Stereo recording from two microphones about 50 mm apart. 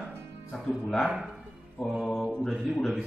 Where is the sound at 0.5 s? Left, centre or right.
Centre.